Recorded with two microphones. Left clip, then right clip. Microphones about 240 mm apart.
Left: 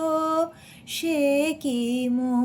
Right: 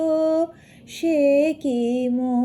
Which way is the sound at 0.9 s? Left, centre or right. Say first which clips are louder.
Right 5 dB; left.